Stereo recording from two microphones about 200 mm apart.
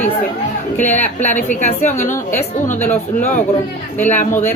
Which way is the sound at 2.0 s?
10° left (ahead or behind).